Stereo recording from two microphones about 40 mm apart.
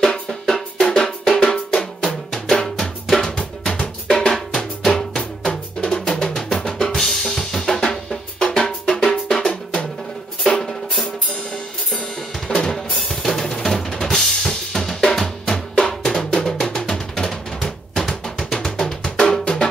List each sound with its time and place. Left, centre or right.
0.3 s drum: centre
0.7 s music: centre
1.3 s drum: left
6.2 s music: centre
7.0 s drum kit: centre
8.5 s drum: centre
12.0 s drum kit: centre
16.1 s music: centre